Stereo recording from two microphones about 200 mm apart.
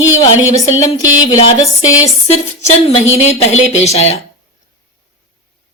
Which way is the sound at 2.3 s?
30° left (ahead or behind).